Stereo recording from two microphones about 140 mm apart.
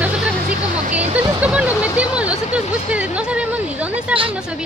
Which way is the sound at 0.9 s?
55° right (ahead or behind).